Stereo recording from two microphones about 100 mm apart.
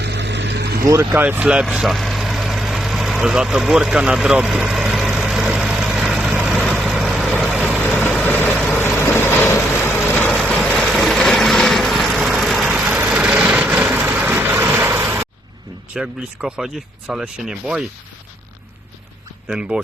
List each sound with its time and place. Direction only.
0.9 s speech: 30° right (ahead or behind)
1.2 s speech: 15° right (ahead or behind)
1.6 s speech: centre (ahead or behind)
4.7 s vehicle: 5° right (ahead or behind)
8.2 s vehicle: 15° left (ahead or behind)
9.0 s vehicle: 25° left (ahead or behind)
10.4 s vehicle: 5° left (ahead or behind); by 15.3 s 25° right (ahead or behind)
16.0 s speech: 5° right (ahead or behind)
19.5 s speech: 10° right (ahead or behind)